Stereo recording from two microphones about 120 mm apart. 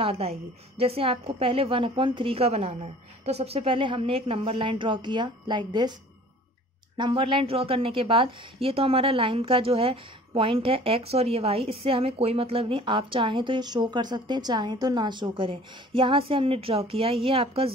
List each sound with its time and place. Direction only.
0.0 s a woman's voice: 55° right (ahead or behind); by 5.9 s 35° right (ahead or behind)
7.0 s a woman's voice: 45° right (ahead or behind)